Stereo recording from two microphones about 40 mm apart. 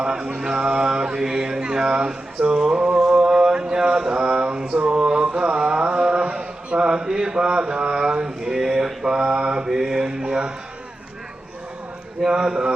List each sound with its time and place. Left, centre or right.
0.0 s mantra: centre
4.7 s a sound: right
4.9 s mantra: right
9.7 s mantra: centre
12.2 s speech: centre